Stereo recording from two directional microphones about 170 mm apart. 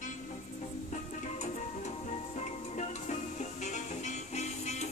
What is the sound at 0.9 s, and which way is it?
Music, 45° left (ahead or behind).